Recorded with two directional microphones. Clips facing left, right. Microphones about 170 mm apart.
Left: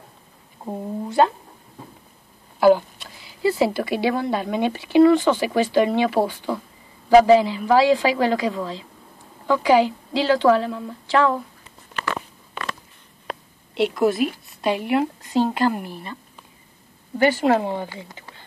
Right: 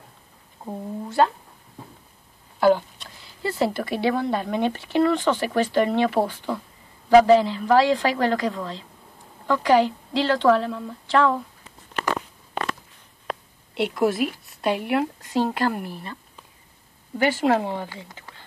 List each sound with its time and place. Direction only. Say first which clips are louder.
0.7 s speech: left 3 dB; 15° left (ahead or behind)
2.6 s a woman's voice: left 3 dB; 5° left (ahead or behind)
13.7 s a woman's voice: left 2 dB; 5° right (ahead or behind)
17.2 s a woman's voice: left 3 dB; 5° right (ahead or behind)